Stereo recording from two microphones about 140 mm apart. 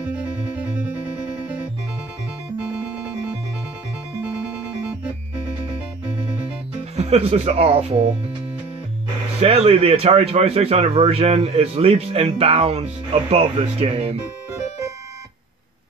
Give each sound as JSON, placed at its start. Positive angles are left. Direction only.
{"t": 0.6, "sound": "music", "side_deg": -10}
{"t": 2.6, "sound": "music", "side_deg": -5}
{"t": 7.0, "sound": "speech", "side_deg": -50}
{"t": 9.4, "sound": "speech", "side_deg": -45}